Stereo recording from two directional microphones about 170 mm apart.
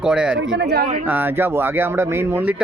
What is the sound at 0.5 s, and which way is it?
Speech, 80° right.